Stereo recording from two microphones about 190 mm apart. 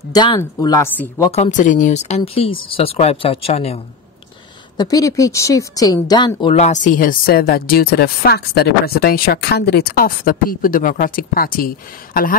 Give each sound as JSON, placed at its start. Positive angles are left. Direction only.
{"t": 0.1, "sound": "a woman's voice", "side_deg": 20}
{"t": 1.3, "sound": "speech", "side_deg": 40}
{"t": 4.7, "sound": "a woman's voice", "side_deg": 20}
{"t": 6.5, "sound": "speech", "side_deg": 40}